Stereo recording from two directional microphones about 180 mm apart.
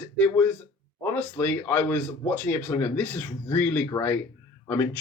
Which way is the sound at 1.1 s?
10° left (ahead or behind).